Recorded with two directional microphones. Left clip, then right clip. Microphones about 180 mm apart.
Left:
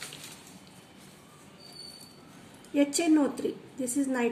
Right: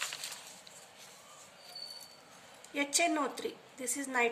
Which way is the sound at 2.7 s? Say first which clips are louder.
Left 6 dB; 40° right (ahead or behind).